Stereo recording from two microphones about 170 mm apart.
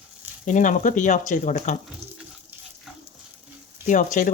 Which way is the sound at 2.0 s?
40° right (ahead or behind).